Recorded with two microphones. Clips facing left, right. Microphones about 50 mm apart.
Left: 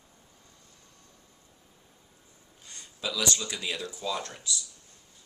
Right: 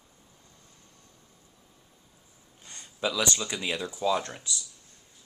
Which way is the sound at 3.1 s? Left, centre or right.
Centre.